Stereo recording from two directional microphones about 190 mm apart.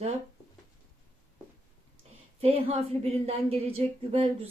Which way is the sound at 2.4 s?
30° right (ahead or behind).